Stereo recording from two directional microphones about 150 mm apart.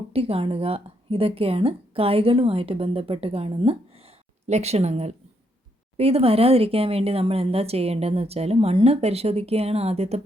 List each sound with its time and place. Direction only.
0.1 s speech: 40° right (ahead or behind)